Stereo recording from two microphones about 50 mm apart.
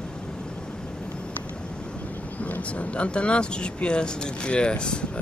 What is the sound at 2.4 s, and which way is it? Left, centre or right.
Speech, left.